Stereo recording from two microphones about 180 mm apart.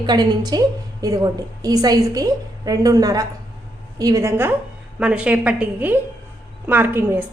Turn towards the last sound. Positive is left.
turn(degrees=-10)  # may be behind; listen again after turning